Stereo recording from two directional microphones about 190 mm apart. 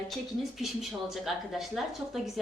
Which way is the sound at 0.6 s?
Centre (ahead or behind).